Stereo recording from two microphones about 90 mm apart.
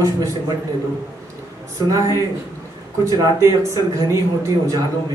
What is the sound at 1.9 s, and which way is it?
Speech, 35° right (ahead or behind).